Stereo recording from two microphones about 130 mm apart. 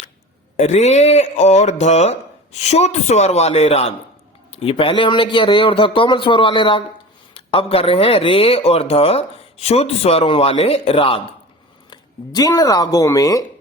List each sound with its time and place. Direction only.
0.5 s a man's voice: 60° left (ahead or behind); by 11.3 s 45° left (ahead or behind)
11.9 s speech: 30° left (ahead or behind)